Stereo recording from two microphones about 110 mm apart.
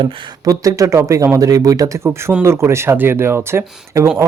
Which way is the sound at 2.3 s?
20° right (ahead or behind).